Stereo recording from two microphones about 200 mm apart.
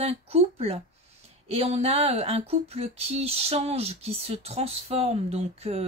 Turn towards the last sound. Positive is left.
turn(degrees=-30)  # may be behind; listen again after turning